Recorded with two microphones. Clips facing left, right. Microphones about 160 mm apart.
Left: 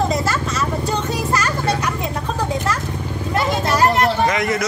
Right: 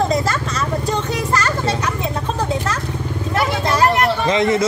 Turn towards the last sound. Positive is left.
turn(degrees=-25)  # may be behind; listen again after turning